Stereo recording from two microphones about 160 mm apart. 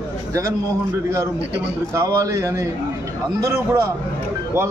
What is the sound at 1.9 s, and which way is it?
A man's voice, 20° right (ahead or behind).